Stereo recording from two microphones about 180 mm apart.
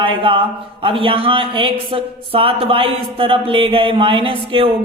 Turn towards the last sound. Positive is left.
turn(degrees=-30)  # may be behind; listen again after turning